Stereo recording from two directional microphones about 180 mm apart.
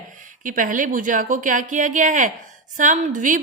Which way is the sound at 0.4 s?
45° right (ahead or behind).